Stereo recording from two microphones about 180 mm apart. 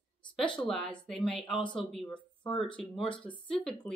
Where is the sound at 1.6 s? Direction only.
25° left (ahead or behind).